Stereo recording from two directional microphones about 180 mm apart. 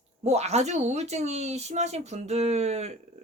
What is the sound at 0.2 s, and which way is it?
Speech, 40° right (ahead or behind).